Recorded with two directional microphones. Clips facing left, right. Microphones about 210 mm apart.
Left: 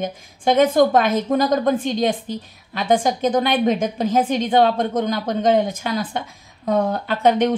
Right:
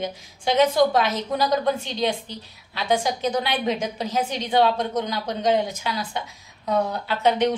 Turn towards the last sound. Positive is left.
turn(degrees=50)  # may be behind; listen again after turning